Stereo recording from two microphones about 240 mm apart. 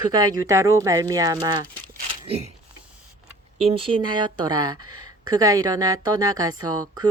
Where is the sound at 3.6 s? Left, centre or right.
Right.